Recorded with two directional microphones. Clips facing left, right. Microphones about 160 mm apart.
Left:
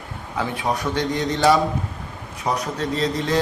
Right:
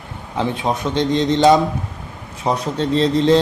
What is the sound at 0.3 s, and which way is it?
Speech, 25° right (ahead or behind).